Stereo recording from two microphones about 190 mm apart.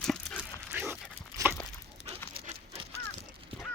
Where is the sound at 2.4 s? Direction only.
25° right (ahead or behind).